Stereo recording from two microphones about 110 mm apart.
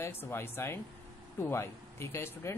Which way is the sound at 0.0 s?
20° left (ahead or behind).